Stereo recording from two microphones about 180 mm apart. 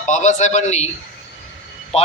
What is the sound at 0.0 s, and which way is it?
Speech, 40° left (ahead or behind).